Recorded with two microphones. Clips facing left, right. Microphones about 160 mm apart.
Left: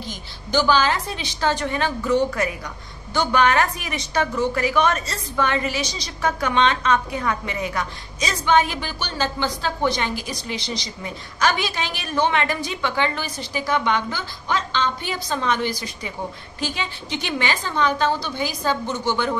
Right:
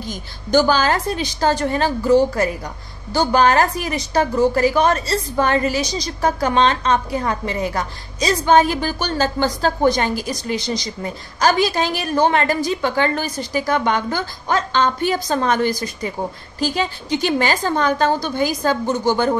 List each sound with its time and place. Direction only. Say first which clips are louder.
0.0 s a woman's voice: right 4 dB; 45° right (ahead or behind)